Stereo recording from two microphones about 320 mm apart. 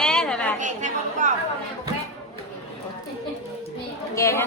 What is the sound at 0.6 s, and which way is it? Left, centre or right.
Chatter, right.